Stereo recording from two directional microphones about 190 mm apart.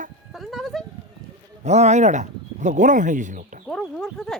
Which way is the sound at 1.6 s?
35° right (ahead or behind).